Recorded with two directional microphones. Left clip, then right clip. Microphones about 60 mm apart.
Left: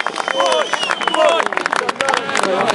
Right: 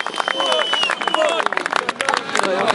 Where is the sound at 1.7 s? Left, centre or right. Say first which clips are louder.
Left 3 dB; right.